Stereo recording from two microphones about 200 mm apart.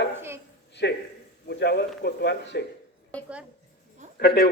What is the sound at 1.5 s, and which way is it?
A man's voice, 55° left (ahead or behind).